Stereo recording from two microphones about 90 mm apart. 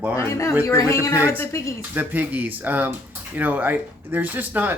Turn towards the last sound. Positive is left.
turn(degrees=-20)  # may be behind; listen again after turning